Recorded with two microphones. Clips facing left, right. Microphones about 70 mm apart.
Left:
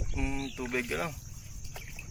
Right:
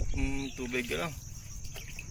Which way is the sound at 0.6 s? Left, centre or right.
Centre.